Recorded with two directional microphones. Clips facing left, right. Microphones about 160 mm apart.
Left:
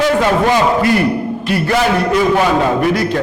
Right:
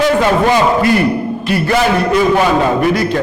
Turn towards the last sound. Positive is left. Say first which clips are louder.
# right 1 dB
turn(degrees=-15)  # may be behind; listen again after turning